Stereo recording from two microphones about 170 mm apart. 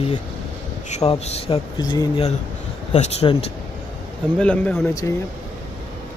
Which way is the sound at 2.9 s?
40° left (ahead or behind).